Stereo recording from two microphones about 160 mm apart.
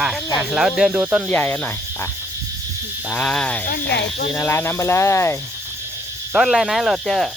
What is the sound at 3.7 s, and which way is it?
Speech, 90° left.